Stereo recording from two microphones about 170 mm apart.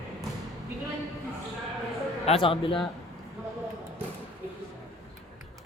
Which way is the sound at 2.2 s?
35° left (ahead or behind).